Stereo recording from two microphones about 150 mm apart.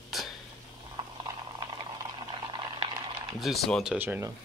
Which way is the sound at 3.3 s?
Centre (ahead or behind).